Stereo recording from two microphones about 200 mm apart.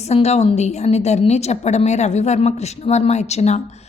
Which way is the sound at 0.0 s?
30° left (ahead or behind).